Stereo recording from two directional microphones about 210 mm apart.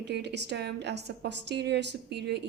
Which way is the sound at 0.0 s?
55° right (ahead or behind).